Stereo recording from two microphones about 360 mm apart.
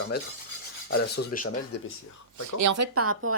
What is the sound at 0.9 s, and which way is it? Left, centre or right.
Filing, left.